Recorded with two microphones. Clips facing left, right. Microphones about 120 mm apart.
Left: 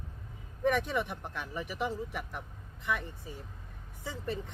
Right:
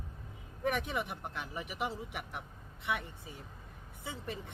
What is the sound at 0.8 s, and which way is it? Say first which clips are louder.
Speech: left 4 dB; 10° right (ahead or behind).